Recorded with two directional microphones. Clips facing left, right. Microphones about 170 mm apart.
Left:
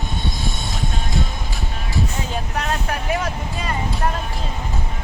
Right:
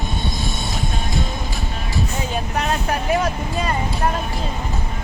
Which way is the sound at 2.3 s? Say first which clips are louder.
Right 4 dB; 15° right (ahead or behind).